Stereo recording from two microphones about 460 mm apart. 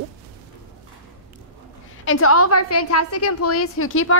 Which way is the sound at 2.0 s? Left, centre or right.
Left.